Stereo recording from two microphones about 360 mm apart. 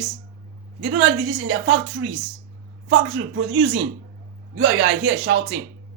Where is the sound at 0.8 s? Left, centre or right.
Right.